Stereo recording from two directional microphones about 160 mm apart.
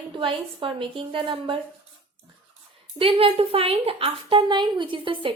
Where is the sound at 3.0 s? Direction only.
35° right (ahead or behind).